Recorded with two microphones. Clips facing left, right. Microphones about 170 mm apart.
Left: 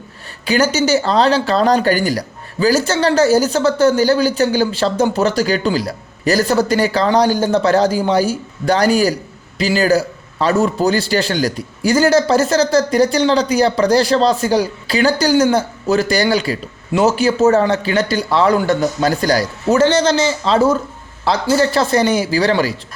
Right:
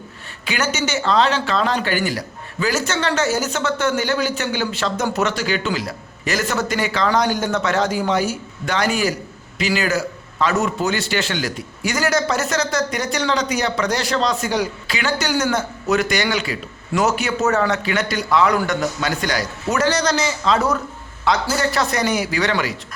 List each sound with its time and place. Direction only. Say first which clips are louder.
0.4 s a man's voice: left 8 dB; 35° left (ahead or behind)